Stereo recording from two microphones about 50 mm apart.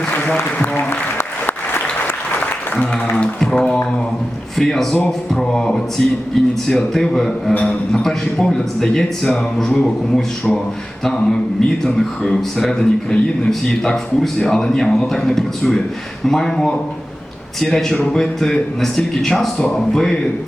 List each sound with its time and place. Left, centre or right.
0.9 s applause: left
3.2 s music: left
4.5 s a man's voice: centre